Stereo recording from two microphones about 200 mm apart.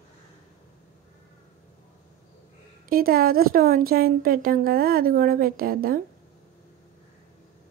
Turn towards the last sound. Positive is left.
turn(degrees=-50)  # may be behind; listen again after turning